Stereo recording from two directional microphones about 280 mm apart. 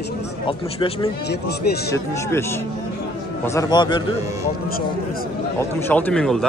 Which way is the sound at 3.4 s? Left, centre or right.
Centre.